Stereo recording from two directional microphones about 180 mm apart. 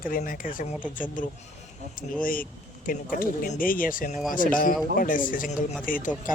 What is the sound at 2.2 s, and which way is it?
Speech, 50° left (ahead or behind).